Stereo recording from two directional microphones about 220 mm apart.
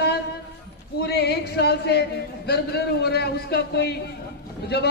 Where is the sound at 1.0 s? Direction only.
45° left (ahead or behind).